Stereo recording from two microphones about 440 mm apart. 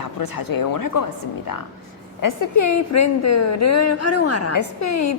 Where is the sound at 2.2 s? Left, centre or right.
Left.